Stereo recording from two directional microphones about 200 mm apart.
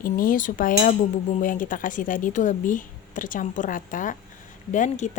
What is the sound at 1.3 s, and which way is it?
Speech, 40° left (ahead or behind).